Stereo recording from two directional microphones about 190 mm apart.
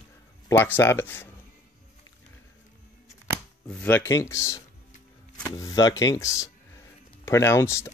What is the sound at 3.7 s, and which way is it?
Speech, 5° left (ahead or behind).